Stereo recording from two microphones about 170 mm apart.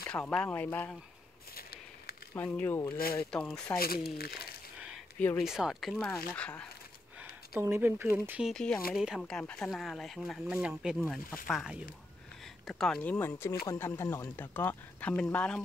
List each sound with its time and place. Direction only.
0.1 s speech: 5° left (ahead or behind)
1.5 s a sound: 65° left (ahead or behind)
2.3 s speech: 10° left (ahead or behind)
3.7 s speech: 60° left (ahead or behind)
5.4 s speech: 5° right (ahead or behind)
7.2 s speech: 15° right (ahead or behind); by 15.6 s 5° left (ahead or behind)